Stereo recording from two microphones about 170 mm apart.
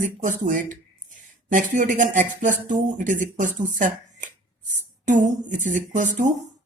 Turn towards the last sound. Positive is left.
turn(degrees=-45)  # may be behind; listen again after turning